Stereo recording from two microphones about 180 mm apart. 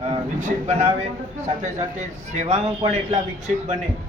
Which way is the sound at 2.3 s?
40° right (ahead or behind).